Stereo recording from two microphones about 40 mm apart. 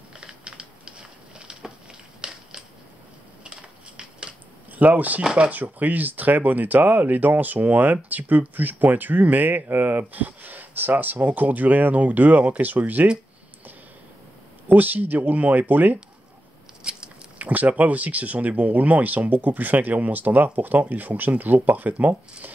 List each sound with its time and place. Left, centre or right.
0.2 s typing: centre
1.5 s a sound: right
2.2 s crushing: centre
3.4 s scissors: right
4.7 s speech: right
14.7 s speech: right
16.8 s biting: right
17.4 s speech: right